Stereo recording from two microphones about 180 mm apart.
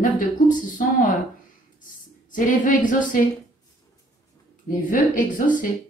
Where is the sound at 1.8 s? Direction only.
50° left (ahead or behind).